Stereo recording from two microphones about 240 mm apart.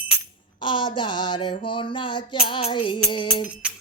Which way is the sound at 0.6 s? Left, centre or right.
Centre.